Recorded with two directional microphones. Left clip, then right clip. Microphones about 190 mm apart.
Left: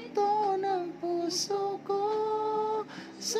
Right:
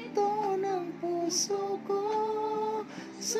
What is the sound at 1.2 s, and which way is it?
Mantra, 25° left (ahead or behind).